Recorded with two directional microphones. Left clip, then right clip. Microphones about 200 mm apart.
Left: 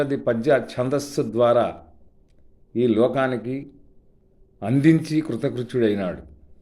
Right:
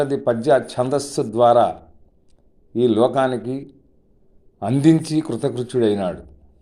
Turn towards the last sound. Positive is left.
turn(degrees=15)  # may be behind; listen again after turning